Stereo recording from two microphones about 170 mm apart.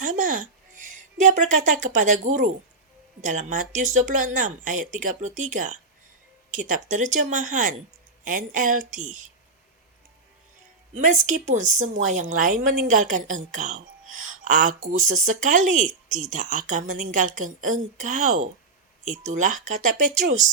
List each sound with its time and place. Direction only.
0.0 s a woman's voice: 50° right (ahead or behind)
10.9 s a woman's voice: 45° right (ahead or behind)